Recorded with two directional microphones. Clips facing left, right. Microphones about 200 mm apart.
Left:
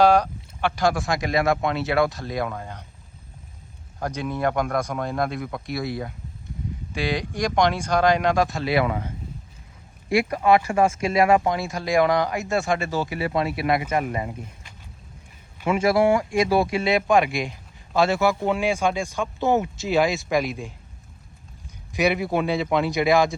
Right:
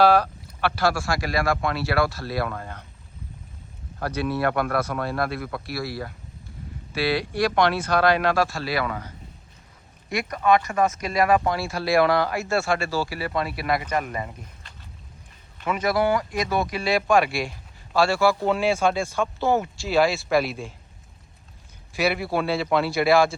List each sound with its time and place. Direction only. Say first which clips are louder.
0.0 s speech: left 1 dB; 15° left (ahead or behind)
4.0 s speech: right 1 dB; 15° left (ahead or behind)
10.2 s speech: right 2 dB; 30° left (ahead or behind)
15.5 s a sound: left 4 dB; 10° left (ahead or behind)
15.8 s speech: left 3 dB; 25° left (ahead or behind)
21.9 s a man's voice: left 2 dB; 15° left (ahead or behind)